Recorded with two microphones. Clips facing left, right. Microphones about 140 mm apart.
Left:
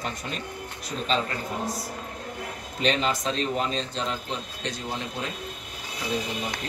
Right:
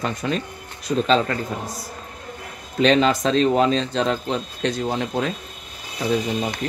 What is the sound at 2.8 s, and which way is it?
Speech, 90° right.